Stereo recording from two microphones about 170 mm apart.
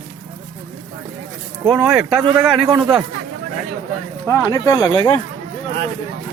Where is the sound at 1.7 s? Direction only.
Centre (ahead or behind).